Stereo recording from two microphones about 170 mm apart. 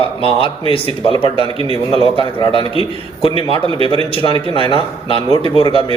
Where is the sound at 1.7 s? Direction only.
30° right (ahead or behind).